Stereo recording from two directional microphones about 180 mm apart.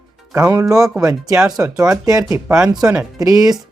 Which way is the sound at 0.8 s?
Centre (ahead or behind).